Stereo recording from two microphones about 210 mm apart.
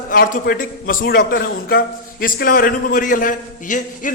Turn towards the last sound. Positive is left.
turn(degrees=40)  # may be behind; listen again after turning